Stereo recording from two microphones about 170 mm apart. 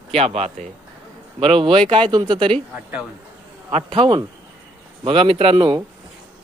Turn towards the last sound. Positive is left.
turn(degrees=-30)  # may be behind; listen again after turning